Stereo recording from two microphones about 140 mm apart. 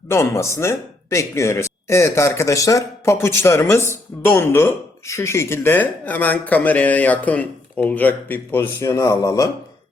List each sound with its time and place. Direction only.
0.1 s speech: 20° left (ahead or behind)